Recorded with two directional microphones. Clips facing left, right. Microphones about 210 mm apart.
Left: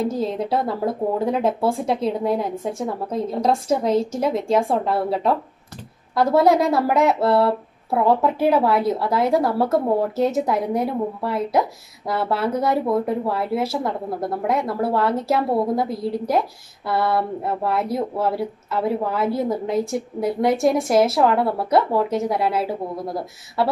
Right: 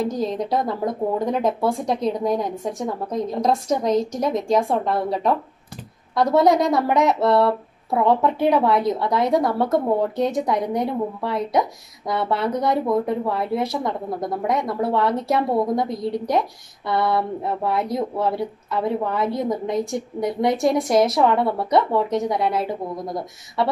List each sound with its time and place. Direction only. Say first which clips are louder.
0.2 s speech: even; 5° left (ahead or behind)
3.9 s a woman's voice: even; 30° left (ahead or behind)
4.4 s speech: right 1 dB; centre (ahead or behind)